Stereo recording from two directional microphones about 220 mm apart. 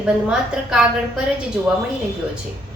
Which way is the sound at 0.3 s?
5° right (ahead or behind).